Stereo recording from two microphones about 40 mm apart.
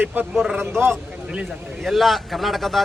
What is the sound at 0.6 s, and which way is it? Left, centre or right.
Speech, right.